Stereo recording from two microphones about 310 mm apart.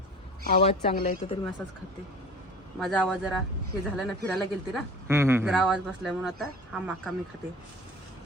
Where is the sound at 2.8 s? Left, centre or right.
Centre.